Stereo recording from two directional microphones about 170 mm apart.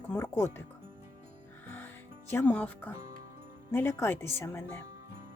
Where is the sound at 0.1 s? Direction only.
15° left (ahead or behind).